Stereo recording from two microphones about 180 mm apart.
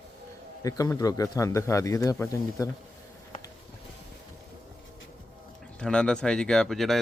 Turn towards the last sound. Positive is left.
turn(degrees=0)  # may be behind; listen again after turning